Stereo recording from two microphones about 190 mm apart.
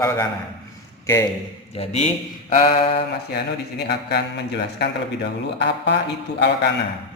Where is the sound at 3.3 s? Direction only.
60° left (ahead or behind).